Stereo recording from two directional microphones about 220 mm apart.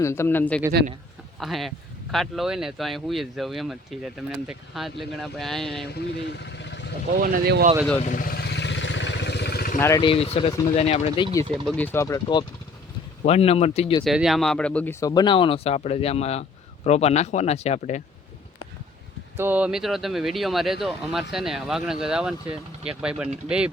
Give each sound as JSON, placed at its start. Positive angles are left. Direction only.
{"t": 0.0, "sound": "speech", "side_deg": 10}
{"t": 5.9, "sound": "speech", "side_deg": 50}
{"t": 7.2, "sound": "speech", "side_deg": -45}
{"t": 8.0, "sound": "vehicle", "side_deg": 40}
{"t": 9.7, "sound": "speech", "side_deg": 15}
{"t": 11.6, "sound": "speech", "side_deg": 5}
{"t": 14.0, "sound": "speech", "side_deg": 0}
{"t": 19.4, "sound": "speech", "side_deg": -5}